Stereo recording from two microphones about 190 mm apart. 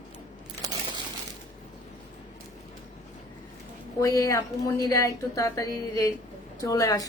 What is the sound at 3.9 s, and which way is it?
Speech, 15° left (ahead or behind).